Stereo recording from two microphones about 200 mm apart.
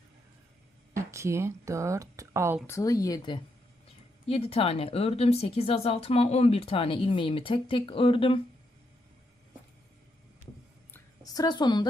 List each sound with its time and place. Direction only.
0.9 s speech: 15° right (ahead or behind)
2.6 s speech: 15° left (ahead or behind)
10.9 s a sound: 20° left (ahead or behind)